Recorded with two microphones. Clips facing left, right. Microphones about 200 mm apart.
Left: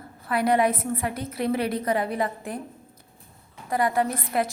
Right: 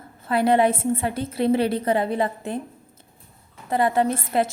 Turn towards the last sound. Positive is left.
turn(degrees=-25)  # may be behind; listen again after turning